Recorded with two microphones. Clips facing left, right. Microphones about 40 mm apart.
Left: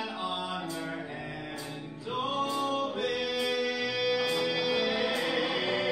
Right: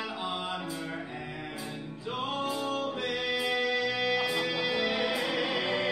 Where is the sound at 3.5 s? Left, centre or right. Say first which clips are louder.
Right 1 dB; right.